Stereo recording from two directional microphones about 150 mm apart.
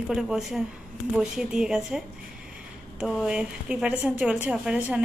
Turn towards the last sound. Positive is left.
turn(degrees=-5)  # may be behind; listen again after turning